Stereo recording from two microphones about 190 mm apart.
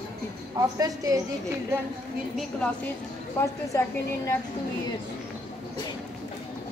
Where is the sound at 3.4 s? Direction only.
15° left (ahead or behind).